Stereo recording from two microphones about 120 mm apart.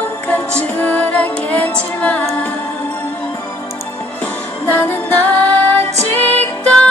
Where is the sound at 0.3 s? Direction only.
10° left (ahead or behind).